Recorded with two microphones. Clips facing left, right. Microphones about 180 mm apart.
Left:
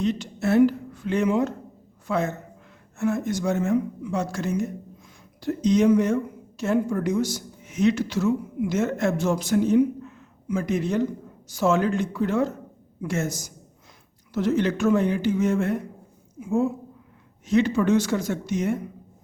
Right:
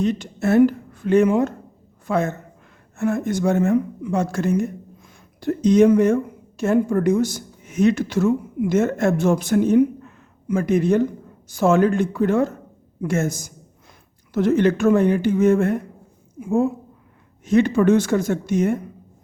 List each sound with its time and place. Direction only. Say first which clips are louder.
0.0 s a woman's voice: right 3 dB; 50° right (ahead or behind)